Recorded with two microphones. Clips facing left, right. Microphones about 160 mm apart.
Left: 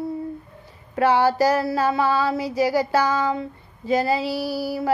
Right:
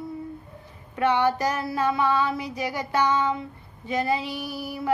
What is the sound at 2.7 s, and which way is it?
Female singing, 90° left.